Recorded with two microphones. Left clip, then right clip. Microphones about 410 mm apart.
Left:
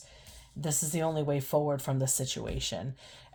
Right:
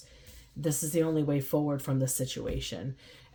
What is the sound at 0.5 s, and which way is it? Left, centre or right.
Speech, left.